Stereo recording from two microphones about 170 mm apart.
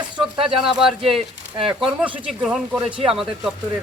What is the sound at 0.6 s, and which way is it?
Speech, centre (ahead or behind).